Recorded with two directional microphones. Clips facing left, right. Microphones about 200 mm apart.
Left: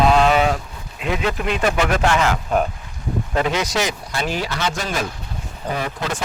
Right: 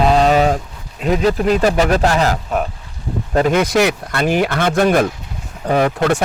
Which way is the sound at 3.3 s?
50° right (ahead or behind).